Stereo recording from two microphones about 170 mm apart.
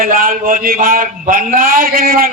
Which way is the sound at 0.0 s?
55° right (ahead or behind).